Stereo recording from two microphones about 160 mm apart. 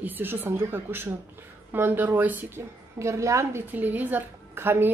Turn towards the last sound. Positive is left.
turn(degrees=-15)  # may be behind; listen again after turning